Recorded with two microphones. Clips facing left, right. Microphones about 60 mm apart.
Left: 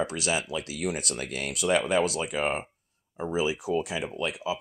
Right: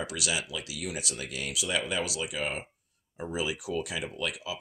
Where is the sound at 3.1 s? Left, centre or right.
Left.